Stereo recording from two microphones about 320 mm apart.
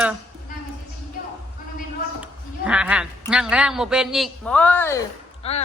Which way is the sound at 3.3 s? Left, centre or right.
Centre.